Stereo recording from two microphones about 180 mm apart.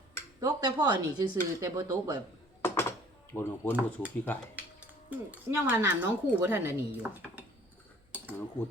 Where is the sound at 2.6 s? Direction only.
15° left (ahead or behind).